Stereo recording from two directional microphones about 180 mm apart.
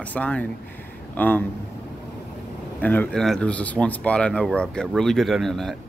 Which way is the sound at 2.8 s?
10° left (ahead or behind).